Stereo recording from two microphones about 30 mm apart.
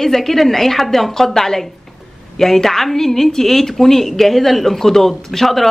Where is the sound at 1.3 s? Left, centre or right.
Centre.